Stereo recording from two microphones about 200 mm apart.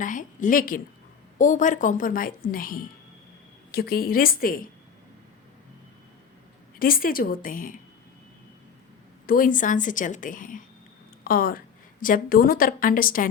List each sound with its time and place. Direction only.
0.0 s a woman's voice: 40° left (ahead or behind)
6.7 s a woman's voice: 45° left (ahead or behind)
9.2 s a woman's voice: 45° left (ahead or behind)